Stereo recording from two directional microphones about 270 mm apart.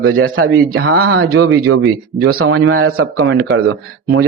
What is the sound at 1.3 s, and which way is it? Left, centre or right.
Speech, right.